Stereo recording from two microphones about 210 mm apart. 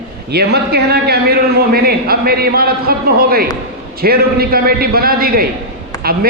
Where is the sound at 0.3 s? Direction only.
50° right (ahead or behind).